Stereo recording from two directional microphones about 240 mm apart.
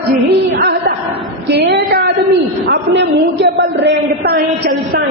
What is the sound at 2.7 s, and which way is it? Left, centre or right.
A man's voice, right.